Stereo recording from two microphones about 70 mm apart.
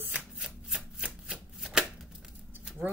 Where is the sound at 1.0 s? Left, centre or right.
Centre.